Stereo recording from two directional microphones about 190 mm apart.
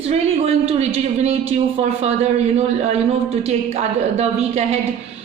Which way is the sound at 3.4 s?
35° right (ahead or behind).